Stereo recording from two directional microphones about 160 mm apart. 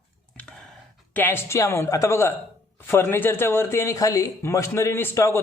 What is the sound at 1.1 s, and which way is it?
Speech, 15° left (ahead or behind).